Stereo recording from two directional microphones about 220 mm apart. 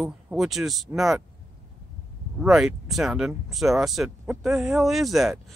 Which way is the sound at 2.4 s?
Centre (ahead or behind).